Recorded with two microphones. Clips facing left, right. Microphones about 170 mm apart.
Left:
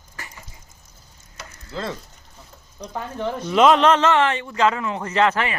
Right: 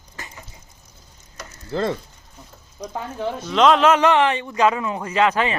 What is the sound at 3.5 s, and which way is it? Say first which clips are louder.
A man's voice: even; 5° left (ahead or behind).